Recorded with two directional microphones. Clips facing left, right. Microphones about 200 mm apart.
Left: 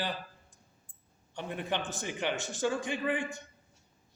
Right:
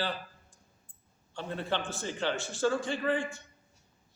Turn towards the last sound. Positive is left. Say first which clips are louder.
# right 2 dB
turn(degrees=15)  # may be behind; listen again after turning